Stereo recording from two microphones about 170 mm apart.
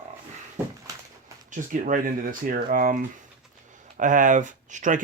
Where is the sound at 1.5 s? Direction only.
50° right (ahead or behind).